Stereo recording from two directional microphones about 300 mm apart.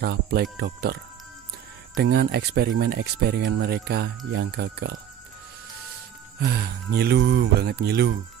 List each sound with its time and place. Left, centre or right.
0.0 s speech: right
2.0 s speech: right
6.4 s speech: right